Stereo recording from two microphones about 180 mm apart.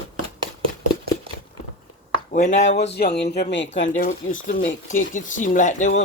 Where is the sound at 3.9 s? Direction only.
50° left (ahead or behind).